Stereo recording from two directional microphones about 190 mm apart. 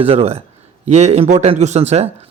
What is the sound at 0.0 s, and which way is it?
A man's voice, 30° right (ahead or behind).